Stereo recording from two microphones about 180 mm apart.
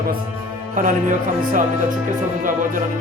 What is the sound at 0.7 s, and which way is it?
Speech, 45° right (ahead or behind).